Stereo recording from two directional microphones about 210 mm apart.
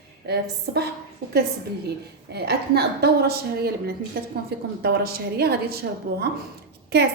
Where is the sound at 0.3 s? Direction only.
50° right (ahead or behind).